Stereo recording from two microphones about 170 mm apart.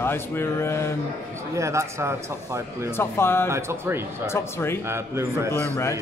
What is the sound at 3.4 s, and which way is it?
Speech, 15° right (ahead or behind).